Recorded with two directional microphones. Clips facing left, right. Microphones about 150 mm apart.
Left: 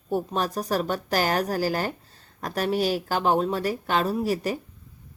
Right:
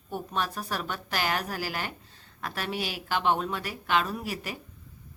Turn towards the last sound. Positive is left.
turn(degrees=40)  # may be behind; listen again after turning